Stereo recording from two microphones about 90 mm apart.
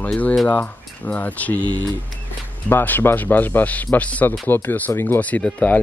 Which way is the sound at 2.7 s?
20° left (ahead or behind).